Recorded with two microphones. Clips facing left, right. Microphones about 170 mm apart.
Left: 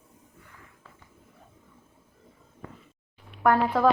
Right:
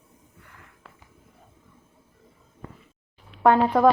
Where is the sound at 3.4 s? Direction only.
20° right (ahead or behind).